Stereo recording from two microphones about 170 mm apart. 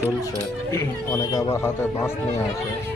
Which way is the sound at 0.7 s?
20° left (ahead or behind).